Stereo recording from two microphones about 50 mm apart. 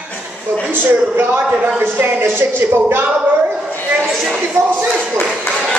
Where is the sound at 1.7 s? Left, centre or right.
Right.